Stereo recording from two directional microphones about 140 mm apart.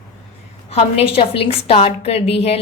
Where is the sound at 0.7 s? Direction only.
45° left (ahead or behind).